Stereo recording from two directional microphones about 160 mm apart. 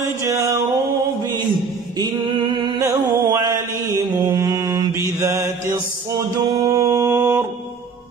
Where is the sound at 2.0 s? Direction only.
25° right (ahead or behind).